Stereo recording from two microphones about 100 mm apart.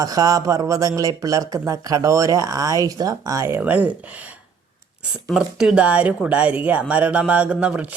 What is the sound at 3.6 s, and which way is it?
Speech, 15° right (ahead or behind).